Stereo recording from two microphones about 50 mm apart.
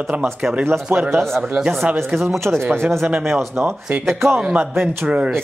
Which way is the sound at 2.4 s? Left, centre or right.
Right.